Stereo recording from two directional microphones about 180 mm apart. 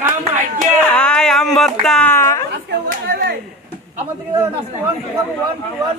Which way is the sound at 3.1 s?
65° right (ahead or behind).